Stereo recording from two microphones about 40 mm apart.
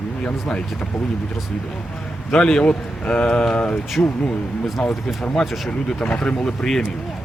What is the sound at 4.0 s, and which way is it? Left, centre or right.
Speech, left.